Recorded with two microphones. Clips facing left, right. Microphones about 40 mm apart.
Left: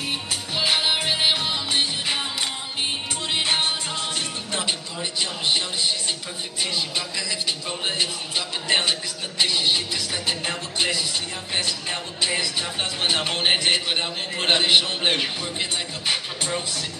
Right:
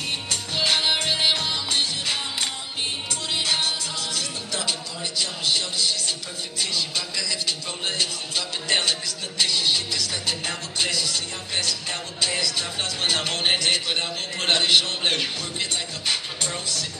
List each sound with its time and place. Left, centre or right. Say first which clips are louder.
0.3 s music: even; centre
3.3 s music: left 2 dB; left